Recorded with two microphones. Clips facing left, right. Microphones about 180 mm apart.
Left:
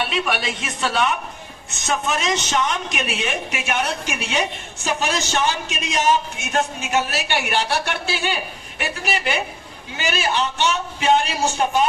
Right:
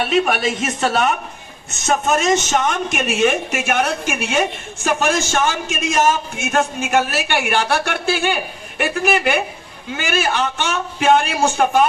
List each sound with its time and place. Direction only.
0.0 s a man's voice: 45° right (ahead or behind)